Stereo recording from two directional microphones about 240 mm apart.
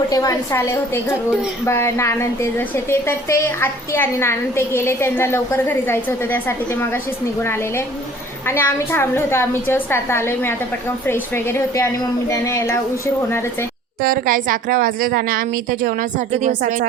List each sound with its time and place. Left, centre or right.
0.1 s a woman's voice: centre
14.0 s a woman's voice: right